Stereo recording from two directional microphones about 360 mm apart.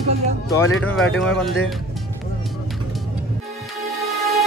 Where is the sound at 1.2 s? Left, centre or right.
Centre.